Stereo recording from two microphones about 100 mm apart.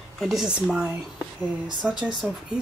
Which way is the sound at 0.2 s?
Centre (ahead or behind).